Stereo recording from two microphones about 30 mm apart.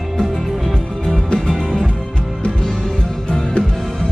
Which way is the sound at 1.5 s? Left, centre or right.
Left.